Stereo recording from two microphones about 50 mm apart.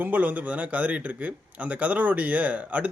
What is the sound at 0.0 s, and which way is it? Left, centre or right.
Speech, right.